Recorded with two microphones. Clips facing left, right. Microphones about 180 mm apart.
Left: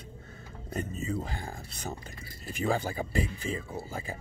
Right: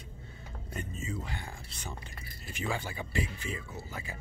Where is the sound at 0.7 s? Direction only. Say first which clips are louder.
Left 6 dB; 35° left (ahead or behind).